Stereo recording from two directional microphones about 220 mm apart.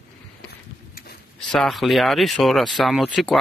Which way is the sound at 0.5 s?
45° left (ahead or behind).